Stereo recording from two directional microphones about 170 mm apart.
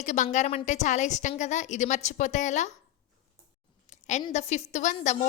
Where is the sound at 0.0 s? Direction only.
45° left (ahead or behind).